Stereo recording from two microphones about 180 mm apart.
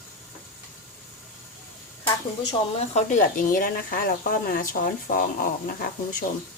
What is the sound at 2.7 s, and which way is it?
Speech, 40° left (ahead or behind).